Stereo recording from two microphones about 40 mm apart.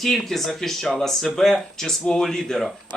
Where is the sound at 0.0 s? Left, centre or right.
Centre.